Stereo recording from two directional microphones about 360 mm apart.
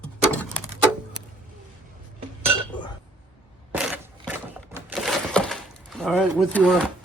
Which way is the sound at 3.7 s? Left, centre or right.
Centre.